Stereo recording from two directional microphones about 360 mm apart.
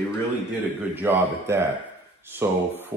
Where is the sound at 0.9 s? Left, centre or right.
Centre.